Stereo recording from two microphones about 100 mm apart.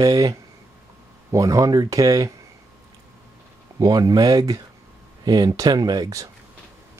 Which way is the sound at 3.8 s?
40° right (ahead or behind).